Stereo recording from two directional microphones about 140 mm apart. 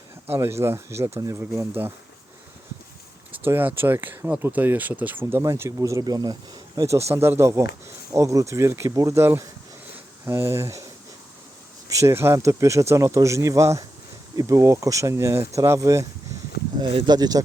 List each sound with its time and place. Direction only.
0.3 s speech: 20° right (ahead or behind)
3.3 s speech: 15° right (ahead or behind)
9.9 s a sound: 20° right (ahead or behind)
11.9 s speech: 20° right (ahead or behind)
16.8 s speech: 35° right (ahead or behind)